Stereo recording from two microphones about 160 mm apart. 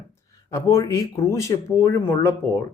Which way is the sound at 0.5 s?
20° left (ahead or behind).